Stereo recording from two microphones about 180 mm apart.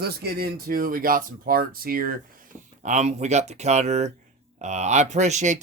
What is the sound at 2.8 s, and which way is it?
Speech, 40° right (ahead or behind).